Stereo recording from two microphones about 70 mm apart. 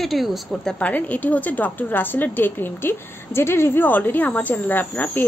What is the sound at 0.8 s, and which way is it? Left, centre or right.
A woman's voice, left.